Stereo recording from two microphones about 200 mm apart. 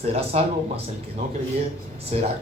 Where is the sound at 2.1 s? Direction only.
35° right (ahead or behind).